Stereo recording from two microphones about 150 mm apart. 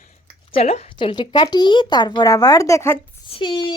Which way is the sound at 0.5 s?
45° left (ahead or behind).